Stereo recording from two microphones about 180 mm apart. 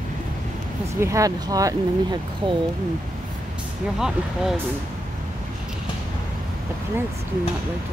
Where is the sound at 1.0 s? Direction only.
15° right (ahead or behind).